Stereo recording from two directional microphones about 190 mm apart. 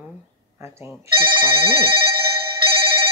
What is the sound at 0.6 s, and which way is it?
Speech, 15° right (ahead or behind).